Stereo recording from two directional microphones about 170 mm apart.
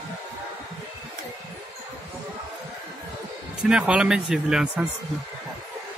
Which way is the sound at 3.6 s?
5° right (ahead or behind).